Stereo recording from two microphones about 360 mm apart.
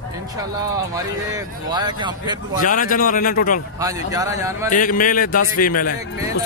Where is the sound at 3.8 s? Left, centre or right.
Centre.